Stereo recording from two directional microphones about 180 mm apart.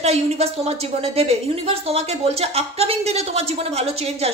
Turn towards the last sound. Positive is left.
turn(degrees=-35)  # may be behind; listen again after turning